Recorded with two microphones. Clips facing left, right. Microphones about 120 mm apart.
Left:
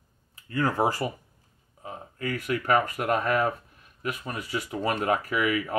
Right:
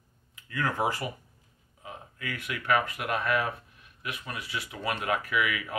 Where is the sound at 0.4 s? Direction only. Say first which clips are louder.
Left 4 dB; 35° left (ahead or behind).